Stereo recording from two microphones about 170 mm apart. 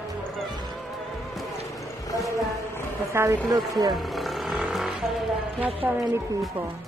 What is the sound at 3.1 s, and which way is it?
Speech, 15° right (ahead or behind).